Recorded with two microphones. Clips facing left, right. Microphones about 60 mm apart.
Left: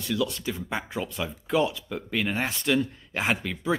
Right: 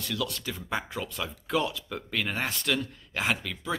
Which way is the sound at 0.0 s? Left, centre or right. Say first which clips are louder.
Left 5 dB; centre.